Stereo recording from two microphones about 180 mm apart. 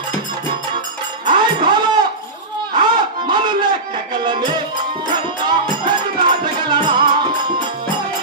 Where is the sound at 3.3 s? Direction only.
25° right (ahead or behind).